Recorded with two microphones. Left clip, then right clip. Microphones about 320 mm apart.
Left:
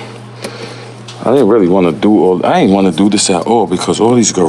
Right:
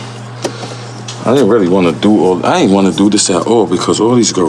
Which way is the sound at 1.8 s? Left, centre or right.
Centre.